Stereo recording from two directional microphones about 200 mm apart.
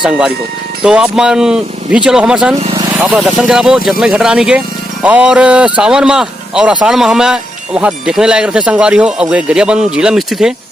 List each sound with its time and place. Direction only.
0.0 s speech: centre (ahead or behind)
2.6 s speech: 30° right (ahead or behind)
3.0 s speech: 5° right (ahead or behind)